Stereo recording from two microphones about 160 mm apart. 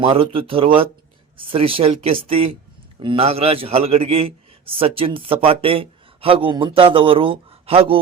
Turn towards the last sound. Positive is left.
turn(degrees=-35)  # may be behind; listen again after turning